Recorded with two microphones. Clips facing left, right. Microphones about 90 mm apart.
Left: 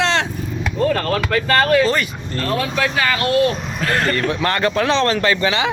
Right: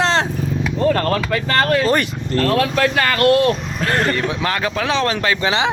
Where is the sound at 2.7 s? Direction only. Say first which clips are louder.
Right 2 dB; 50° right (ahead or behind).